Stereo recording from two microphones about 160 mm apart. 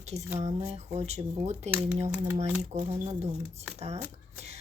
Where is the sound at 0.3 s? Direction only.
40° right (ahead or behind).